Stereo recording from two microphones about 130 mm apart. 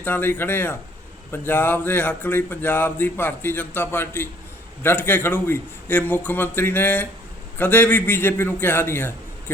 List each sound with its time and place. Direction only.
0.0 s speech: 15° left (ahead or behind)